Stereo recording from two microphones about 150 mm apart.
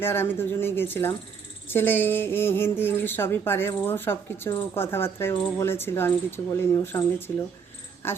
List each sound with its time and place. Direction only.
0.0 s a woman's voice: 15° left (ahead or behind)